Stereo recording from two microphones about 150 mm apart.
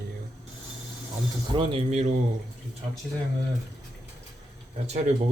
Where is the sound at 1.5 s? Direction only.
45° right (ahead or behind).